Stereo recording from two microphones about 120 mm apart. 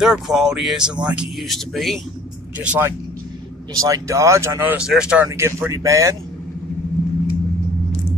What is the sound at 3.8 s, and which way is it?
Speech, 25° right (ahead or behind).